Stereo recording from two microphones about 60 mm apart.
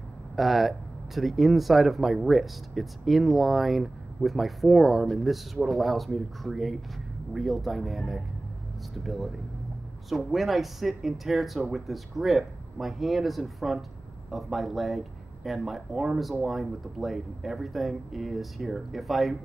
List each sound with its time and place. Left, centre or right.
0.4 s speech: centre